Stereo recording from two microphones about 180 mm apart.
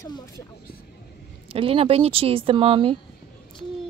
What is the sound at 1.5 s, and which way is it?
A woman's voice, 30° right (ahead or behind).